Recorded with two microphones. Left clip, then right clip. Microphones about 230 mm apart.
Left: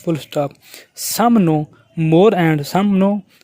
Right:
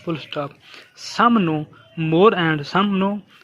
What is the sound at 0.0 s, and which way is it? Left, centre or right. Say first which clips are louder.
Speech: left 6 dB; left.